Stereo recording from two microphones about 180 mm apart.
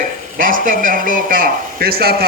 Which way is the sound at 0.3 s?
50° right (ahead or behind).